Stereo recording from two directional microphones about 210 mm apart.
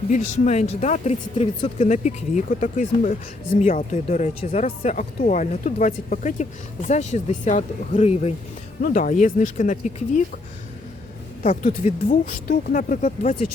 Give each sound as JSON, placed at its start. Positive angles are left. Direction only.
{"t": 0.1, "sound": "speech", "side_deg": 35}
{"t": 11.4, "sound": "speech", "side_deg": 35}